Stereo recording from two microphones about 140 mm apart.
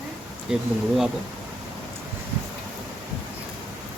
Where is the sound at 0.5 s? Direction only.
5° right (ahead or behind).